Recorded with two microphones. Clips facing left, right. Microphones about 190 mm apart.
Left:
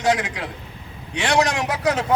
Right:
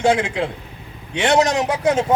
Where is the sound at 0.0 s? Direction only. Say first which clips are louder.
Right 4 dB; 25° right (ahead or behind).